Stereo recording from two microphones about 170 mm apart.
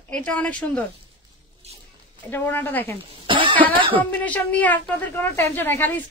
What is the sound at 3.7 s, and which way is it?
Speech, 30° right (ahead or behind).